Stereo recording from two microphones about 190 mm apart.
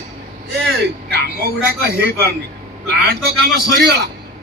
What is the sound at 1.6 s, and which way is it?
Speech, 55° right (ahead or behind).